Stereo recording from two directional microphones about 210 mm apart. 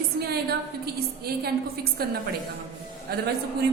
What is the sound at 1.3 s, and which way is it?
A woman's voice, 45° right (ahead or behind).